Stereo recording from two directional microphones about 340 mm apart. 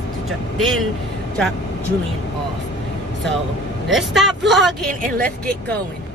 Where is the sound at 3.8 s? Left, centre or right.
Centre.